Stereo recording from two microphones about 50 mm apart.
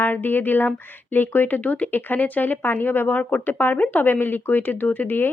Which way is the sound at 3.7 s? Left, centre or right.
Left.